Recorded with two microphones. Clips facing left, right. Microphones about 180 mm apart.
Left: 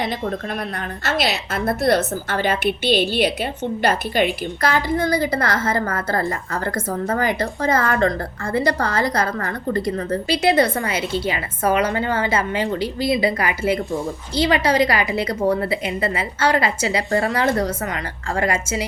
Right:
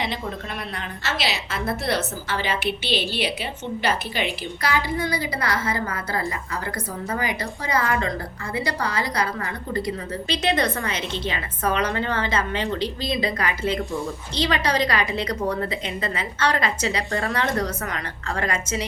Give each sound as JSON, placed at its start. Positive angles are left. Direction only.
{"t": 1.0, "sound": "a woman's voice", "side_deg": 55}
{"t": 10.2, "sound": "a woman's voice", "side_deg": 10}
{"t": 10.5, "sound": "a woman's voice", "side_deg": 30}